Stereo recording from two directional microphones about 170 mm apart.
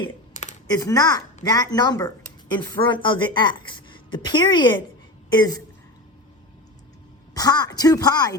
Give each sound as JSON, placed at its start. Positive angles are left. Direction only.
{"t": 0.8, "sound": "speech", "side_deg": 20}
{"t": 7.3, "sound": "speech", "side_deg": 20}